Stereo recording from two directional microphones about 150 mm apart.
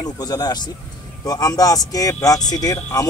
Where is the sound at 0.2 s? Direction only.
25° left (ahead or behind).